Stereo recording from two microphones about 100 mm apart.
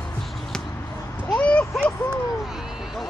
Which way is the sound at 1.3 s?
10° left (ahead or behind).